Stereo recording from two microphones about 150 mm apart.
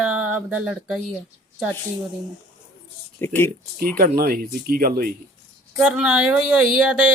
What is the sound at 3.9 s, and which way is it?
Speech, 90° right.